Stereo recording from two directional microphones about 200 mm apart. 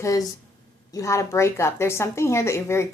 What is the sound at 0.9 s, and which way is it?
Speech, 15° left (ahead or behind).